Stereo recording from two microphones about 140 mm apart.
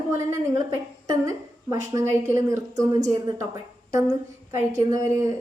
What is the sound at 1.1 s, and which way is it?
A woman's voice, 25° right (ahead or behind).